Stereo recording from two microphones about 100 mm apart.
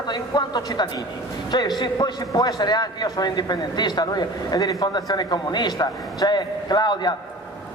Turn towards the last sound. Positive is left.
turn(degrees=45)  # may be behind; listen again after turning